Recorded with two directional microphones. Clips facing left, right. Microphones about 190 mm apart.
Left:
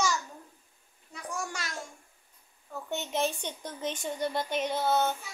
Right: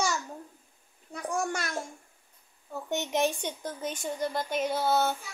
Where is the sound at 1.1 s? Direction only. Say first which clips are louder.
Right 6 dB; 55° right (ahead or behind).